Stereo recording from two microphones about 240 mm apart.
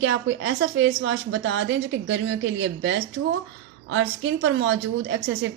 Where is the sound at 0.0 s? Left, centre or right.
Right.